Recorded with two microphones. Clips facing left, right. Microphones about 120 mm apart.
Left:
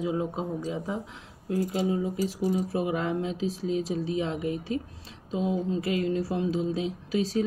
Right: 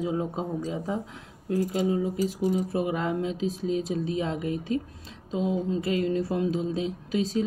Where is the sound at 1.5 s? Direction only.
40° right (ahead or behind).